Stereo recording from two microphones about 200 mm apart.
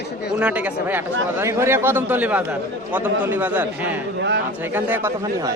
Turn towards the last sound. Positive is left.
turn(degrees=-10)  # may be behind; listen again after turning